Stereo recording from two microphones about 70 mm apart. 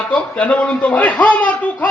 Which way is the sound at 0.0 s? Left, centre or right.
Centre.